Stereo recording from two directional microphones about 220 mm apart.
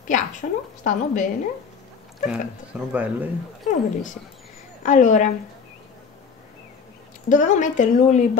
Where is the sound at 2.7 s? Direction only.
5° right (ahead or behind).